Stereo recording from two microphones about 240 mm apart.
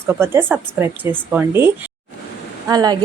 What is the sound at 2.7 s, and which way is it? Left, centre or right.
Speech, centre.